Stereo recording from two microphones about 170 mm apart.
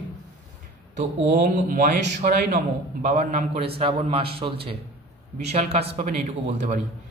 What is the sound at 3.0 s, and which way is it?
A man's voice, 45° right (ahead or behind).